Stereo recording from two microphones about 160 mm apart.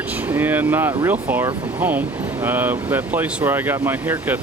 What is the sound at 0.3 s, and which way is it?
Speech, 10° right (ahead or behind).